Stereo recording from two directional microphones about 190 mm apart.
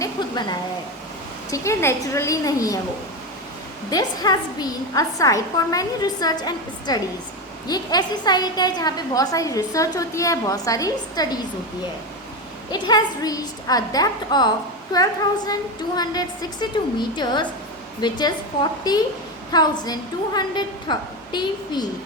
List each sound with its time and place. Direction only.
0.0 s a sound: 20° left (ahead or behind)
1.5 s a woman's voice: 15° left (ahead or behind)
3.8 s a woman's voice: 20° left (ahead or behind)
12.7 s a woman's voice: 20° left (ahead or behind)